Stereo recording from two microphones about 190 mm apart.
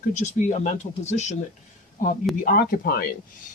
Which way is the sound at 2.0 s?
45° left (ahead or behind).